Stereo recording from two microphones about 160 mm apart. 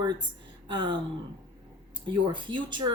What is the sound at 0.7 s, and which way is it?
Speech, 30° right (ahead or behind).